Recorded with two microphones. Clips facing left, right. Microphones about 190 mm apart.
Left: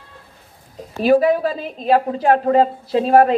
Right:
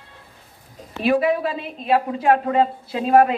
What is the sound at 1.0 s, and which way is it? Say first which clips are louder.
A woman's voice: left 4 dB; 40° left (ahead or behind).